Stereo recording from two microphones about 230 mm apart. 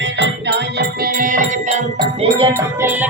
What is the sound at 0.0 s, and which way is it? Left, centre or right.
Music, right.